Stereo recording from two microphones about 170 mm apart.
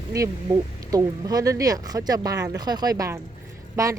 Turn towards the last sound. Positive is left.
turn(degrees=-20)  # may be behind; listen again after turning